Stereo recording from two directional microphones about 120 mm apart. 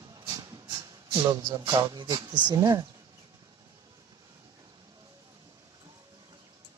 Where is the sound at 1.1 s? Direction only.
30° right (ahead or behind).